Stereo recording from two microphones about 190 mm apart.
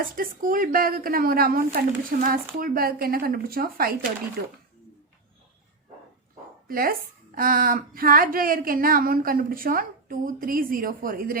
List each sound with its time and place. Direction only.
0.0 s speech: 45° right (ahead or behind)
6.7 s speech: 50° right (ahead or behind)